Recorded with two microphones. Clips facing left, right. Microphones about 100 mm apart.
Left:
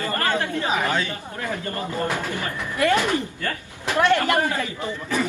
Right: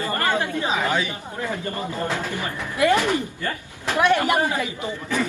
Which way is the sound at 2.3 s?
20° right (ahead or behind).